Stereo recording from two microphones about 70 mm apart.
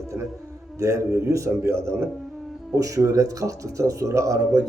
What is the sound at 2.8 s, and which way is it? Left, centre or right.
Speech, right.